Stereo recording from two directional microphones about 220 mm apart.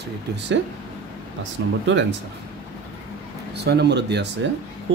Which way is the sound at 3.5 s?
50° right (ahead or behind).